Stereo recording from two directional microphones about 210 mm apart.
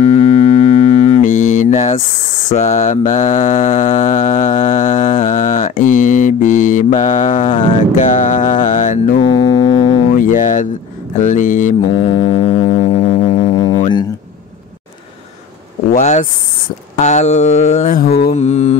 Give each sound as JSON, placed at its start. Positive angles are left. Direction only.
{"t": 0.0, "sound": "mantra", "side_deg": 30}
{"t": 9.2, "sound": "music", "side_deg": 20}
{"t": 10.1, "sound": "a sound", "side_deg": 40}
{"t": 11.1, "sound": "music", "side_deg": 35}
{"t": 15.9, "sound": "a sound", "side_deg": 35}
{"t": 18.3, "sound": "mantra", "side_deg": 30}